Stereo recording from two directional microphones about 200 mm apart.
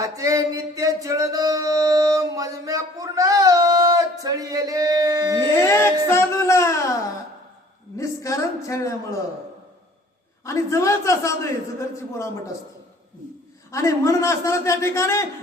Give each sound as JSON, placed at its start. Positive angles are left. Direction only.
{"t": 0.0, "sound": "music", "side_deg": -15}
{"t": 5.6, "sound": "music", "side_deg": 10}
{"t": 7.9, "sound": "a man's voice", "side_deg": 15}
{"t": 10.4, "sound": "a man's voice", "side_deg": 15}
{"t": 13.7, "sound": "a man's voice", "side_deg": 15}